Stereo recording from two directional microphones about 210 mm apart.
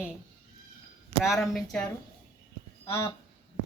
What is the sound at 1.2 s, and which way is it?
Speech, centre (ahead or behind).